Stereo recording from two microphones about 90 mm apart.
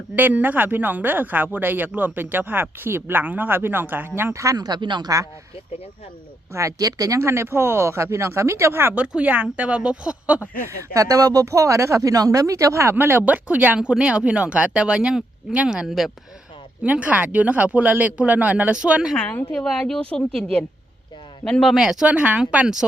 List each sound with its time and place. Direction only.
0.2 s speech: 20° right (ahead or behind); by 5.0 s 55° right (ahead or behind)
5.0 s speech: 40° right (ahead or behind)
6.5 s speech: 35° right (ahead or behind); by 10.4 s 15° right (ahead or behind)
10.7 s speech: 35° right (ahead or behind); by 16.1 s 5° right (ahead or behind)
16.8 s speech: 15° right (ahead or behind)
19.1 s a woman's voice: 15° left (ahead or behind); by 22.8 s 10° right (ahead or behind)